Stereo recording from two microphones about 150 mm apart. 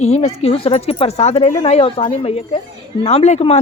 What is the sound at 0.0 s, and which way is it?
A woman's voice, 45° left (ahead or behind).